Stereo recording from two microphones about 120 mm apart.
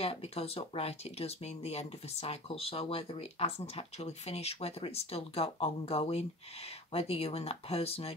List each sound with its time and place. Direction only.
0.0 s speech: 55° left (ahead or behind)